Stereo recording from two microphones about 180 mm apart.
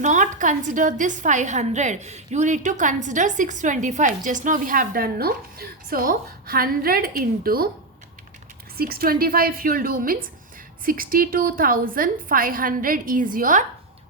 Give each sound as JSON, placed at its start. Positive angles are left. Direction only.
{"t": 0.0, "sound": "a woman's voice", "side_deg": -45}
{"t": 8.8, "sound": "a woman's voice", "side_deg": -55}